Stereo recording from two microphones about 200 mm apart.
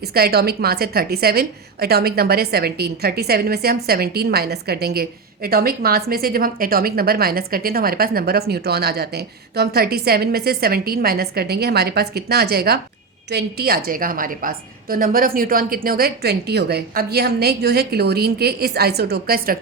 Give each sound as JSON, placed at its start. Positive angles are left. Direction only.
{"t": 0.0, "sound": "a woman's voice", "side_deg": -50}